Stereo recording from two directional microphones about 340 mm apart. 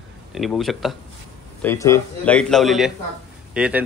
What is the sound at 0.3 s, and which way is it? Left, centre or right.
Speech, centre.